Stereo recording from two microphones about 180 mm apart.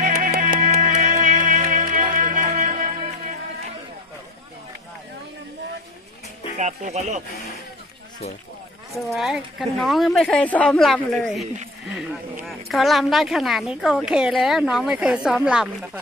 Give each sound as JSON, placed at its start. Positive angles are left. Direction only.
{"t": 0.0, "sound": "music", "side_deg": -50}
{"t": 6.5, "sound": "speech", "side_deg": -40}
{"t": 8.9, "sound": "speech", "side_deg": 0}